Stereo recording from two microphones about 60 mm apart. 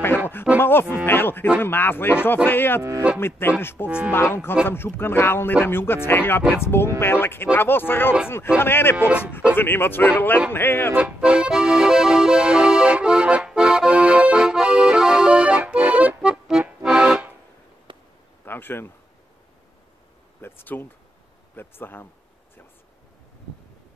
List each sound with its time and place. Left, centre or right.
0.6 s speech: left
8.9 s speech: right
9.6 s speech: left
11.1 s accordion: centre
18.4 s a sound: left
20.4 s speech: left